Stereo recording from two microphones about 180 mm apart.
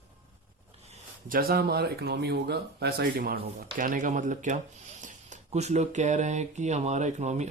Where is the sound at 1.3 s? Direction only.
55° right (ahead or behind).